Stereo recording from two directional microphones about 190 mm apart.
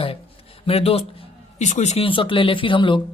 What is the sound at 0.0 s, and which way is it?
Speech, 30° left (ahead or behind).